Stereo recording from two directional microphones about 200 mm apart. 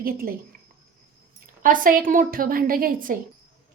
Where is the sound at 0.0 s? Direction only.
45° right (ahead or behind).